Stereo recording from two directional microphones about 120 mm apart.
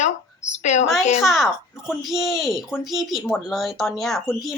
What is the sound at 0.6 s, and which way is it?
Speech, 75° left (ahead or behind).